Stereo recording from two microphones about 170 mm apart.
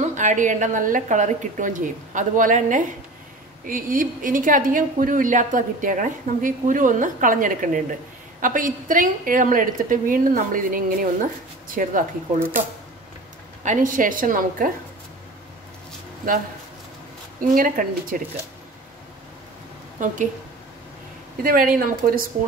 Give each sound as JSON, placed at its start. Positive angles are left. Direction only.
{"t": 0.0, "sound": "a woman's voice", "side_deg": -45}
{"t": 12.4, "sound": "speech", "side_deg": -10}
{"t": 13.7, "sound": "a woman's voice", "side_deg": -50}
{"t": 17.6, "sound": "a woman's voice", "side_deg": -55}
{"t": 20.0, "sound": "a woman's voice", "side_deg": -50}
{"t": 21.4, "sound": "a woman's voice", "side_deg": -60}